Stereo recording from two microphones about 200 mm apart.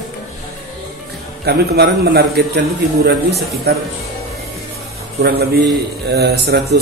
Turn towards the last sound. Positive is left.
turn(degrees=-50)  # may be behind; listen again after turning